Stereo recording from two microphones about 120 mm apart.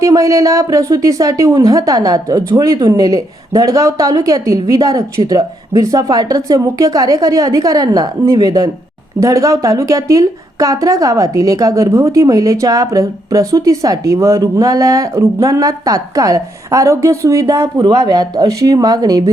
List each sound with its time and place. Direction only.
0.0 s a woman's voice: 25° right (ahead or behind)